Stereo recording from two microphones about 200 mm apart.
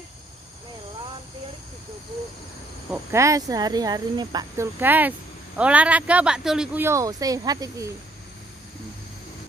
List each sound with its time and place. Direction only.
2.9 s speech: 15° right (ahead or behind)